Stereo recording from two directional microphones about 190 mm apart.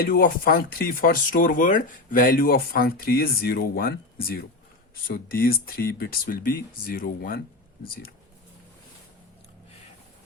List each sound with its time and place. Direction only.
0.0 s speech: 50° left (ahead or behind)